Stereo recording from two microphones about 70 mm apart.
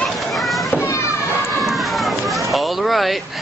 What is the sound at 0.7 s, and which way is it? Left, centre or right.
Children playing, left.